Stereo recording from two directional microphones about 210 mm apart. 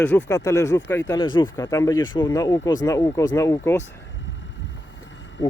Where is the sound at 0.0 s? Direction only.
5° left (ahead or behind).